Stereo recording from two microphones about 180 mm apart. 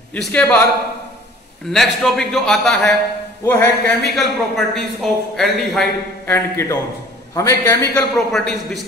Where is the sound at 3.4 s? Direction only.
15° left (ahead or behind).